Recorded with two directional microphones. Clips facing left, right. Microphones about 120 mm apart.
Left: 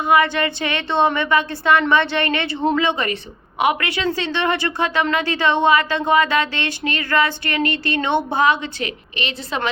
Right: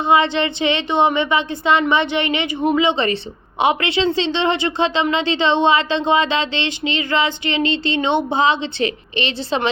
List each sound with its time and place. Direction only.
0.0 s a woman's voice: 25° right (ahead or behind)